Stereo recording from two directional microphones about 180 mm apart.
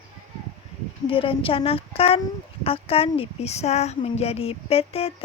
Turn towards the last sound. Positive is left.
turn(degrees=35)  # may be behind; listen again after turning